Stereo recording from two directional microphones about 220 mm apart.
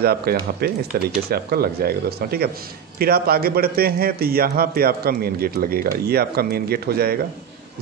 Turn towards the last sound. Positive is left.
turn(degrees=-45)  # may be behind; listen again after turning